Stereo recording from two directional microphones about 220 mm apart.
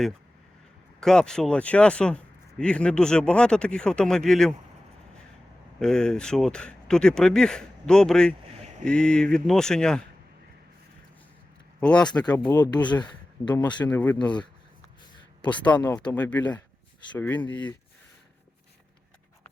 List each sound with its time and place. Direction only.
0.9 s speech: 5° left (ahead or behind)
5.8 s speech: 5° left (ahead or behind)
11.8 s speech: 5° left (ahead or behind)
12.2 s speech: 20° left (ahead or behind)
13.9 s speech: 10° left (ahead or behind)
15.6 s speech: 5° left (ahead or behind)